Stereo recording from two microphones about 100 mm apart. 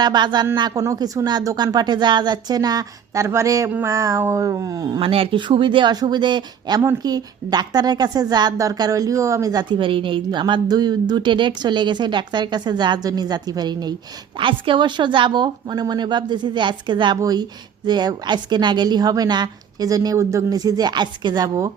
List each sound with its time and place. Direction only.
0.0 s a woman's voice: 45° right (ahead or behind)
0.7 s a woman's voice: 35° right (ahead or behind)
4.9 s a woman's voice: 65° right (ahead or behind); by 13.9 s 45° right (ahead or behind)
14.3 s a woman's voice: 60° right (ahead or behind)
17.2 s a woman's voice: 40° right (ahead or behind)